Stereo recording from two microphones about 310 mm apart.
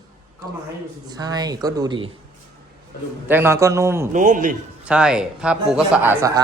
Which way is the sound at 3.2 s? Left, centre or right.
Centre.